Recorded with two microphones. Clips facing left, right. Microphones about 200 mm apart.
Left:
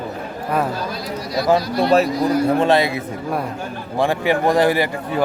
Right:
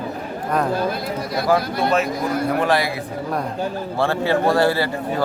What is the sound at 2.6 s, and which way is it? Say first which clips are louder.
Speech: left 2 dB; 25° left (ahead or behind).